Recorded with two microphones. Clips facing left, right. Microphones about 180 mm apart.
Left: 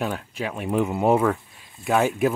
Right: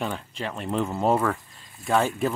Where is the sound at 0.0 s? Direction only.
5° left (ahead or behind).